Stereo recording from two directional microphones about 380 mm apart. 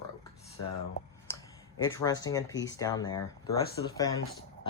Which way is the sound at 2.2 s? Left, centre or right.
Centre.